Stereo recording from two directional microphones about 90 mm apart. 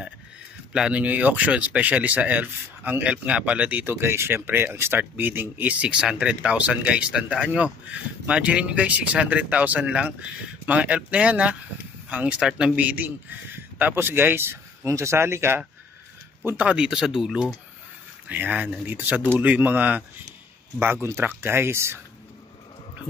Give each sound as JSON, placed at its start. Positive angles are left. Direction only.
{"t": 0.7, "sound": "a man's voice", "side_deg": -10}
{"t": 16.4, "sound": "speech", "side_deg": -15}
{"t": 18.3, "sound": "a man's voice", "side_deg": -20}
{"t": 20.8, "sound": "a man's voice", "side_deg": -25}